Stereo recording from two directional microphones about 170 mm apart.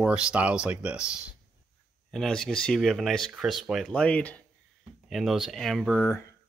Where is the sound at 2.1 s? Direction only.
5° left (ahead or behind).